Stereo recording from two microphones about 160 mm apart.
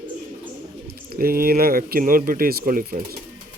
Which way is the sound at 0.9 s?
70° right (ahead or behind).